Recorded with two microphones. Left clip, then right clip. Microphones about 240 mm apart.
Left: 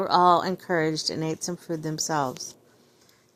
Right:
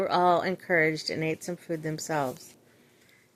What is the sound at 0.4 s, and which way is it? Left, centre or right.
A woman's voice, left.